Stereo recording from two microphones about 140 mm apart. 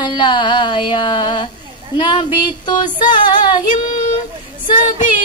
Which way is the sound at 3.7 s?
60° left (ahead or behind).